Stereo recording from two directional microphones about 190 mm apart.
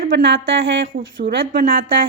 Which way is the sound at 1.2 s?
45° right (ahead or behind).